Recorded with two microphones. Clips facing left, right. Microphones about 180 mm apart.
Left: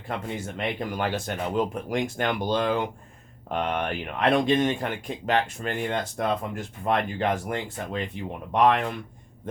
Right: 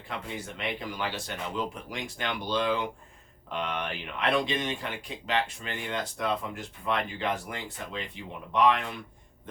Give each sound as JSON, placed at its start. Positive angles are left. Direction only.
{"t": 0.3, "sound": "speech", "side_deg": 45}